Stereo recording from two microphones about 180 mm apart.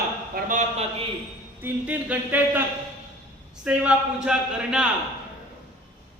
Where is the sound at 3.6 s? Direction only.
5° right (ahead or behind).